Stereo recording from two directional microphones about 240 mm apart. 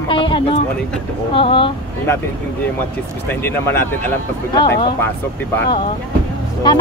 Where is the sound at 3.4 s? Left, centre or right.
Centre.